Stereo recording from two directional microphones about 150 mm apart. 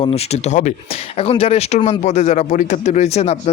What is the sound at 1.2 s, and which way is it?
A man's voice, 40° left (ahead or behind).